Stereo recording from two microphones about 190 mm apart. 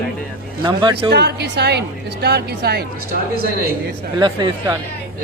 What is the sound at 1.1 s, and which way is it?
A woman's voice, 60° right (ahead or behind).